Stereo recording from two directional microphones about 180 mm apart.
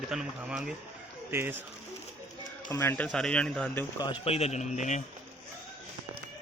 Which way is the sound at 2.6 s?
15° left (ahead or behind).